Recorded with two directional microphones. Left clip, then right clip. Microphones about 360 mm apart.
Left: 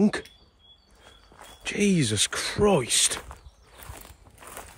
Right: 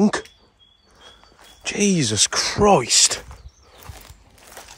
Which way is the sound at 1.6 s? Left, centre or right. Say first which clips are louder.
Right 4 dB; centre.